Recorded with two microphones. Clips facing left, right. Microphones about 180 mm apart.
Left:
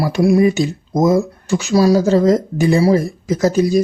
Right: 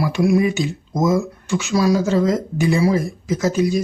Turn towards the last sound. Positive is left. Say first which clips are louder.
# left 4 dB
turn(degrees=35)  # may be behind; listen again after turning